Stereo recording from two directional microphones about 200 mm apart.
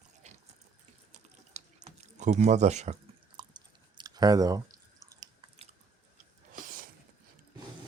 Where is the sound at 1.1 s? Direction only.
35° right (ahead or behind).